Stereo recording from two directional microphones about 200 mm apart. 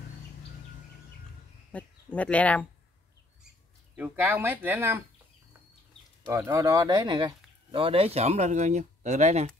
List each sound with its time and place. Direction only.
1.7 s speech: 5° left (ahead or behind)
3.9 s speech: 10° right (ahead or behind)
6.2 s speech: 15° right (ahead or behind); by 9.5 s 35° right (ahead or behind)